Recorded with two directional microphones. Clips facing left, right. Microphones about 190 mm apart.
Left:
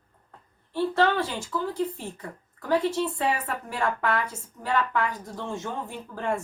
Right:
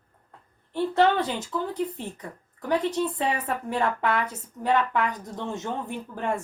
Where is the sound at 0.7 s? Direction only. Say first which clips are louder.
Right 2 dB; 20° right (ahead or behind).